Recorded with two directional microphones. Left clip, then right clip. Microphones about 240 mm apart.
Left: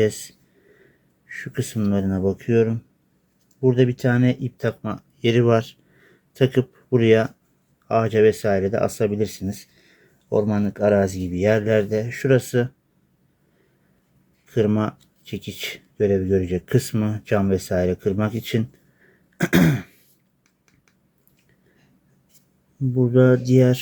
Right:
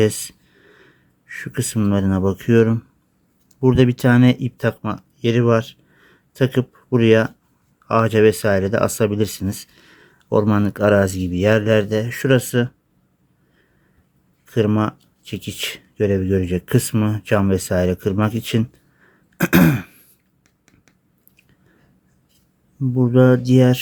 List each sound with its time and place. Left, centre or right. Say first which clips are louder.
0.0 s a sound: right 3 dB; centre
1.3 s speech: right 3 dB; centre
14.4 s speech: right 2 dB; centre
23.0 s speech: right 2 dB; centre